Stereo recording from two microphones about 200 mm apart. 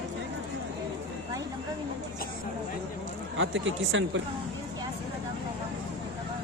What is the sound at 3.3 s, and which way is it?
Speech, 70° right (ahead or behind).